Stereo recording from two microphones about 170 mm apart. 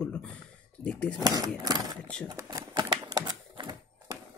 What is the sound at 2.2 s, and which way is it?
Typewriter, 20° right (ahead or behind).